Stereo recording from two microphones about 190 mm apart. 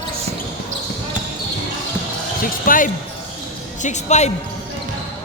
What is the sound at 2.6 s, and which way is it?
Speech, 45° left (ahead or behind).